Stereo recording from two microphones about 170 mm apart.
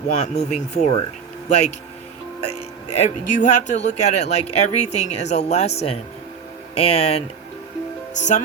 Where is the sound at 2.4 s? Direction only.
40° left (ahead or behind).